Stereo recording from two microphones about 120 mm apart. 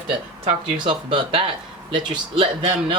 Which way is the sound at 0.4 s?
45° right (ahead or behind).